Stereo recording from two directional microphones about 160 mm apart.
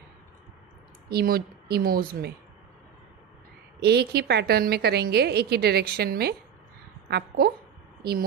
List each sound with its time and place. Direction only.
1.0 s speech: 75° right (ahead or behind)
3.8 s a woman's voice: 85° right